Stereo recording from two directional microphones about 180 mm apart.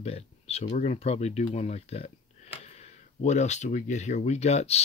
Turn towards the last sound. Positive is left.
turn(degrees=35)  # may be behind; listen again after turning